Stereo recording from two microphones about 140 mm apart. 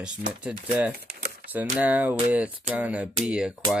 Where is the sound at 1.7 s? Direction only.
10° right (ahead or behind).